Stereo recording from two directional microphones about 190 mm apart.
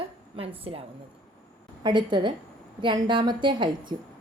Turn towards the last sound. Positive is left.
turn(degrees=-25)  # may be behind; listen again after turning